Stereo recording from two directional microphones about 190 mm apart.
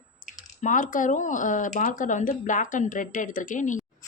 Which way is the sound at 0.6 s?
45° left (ahead or behind).